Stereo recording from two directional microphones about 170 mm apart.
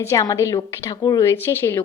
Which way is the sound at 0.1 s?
15° left (ahead or behind).